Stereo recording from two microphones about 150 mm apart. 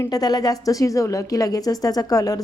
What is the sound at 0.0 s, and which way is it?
A woman's voice, 25° left (ahead or behind).